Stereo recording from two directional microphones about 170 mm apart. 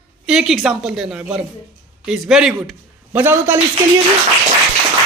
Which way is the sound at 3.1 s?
15° right (ahead or behind).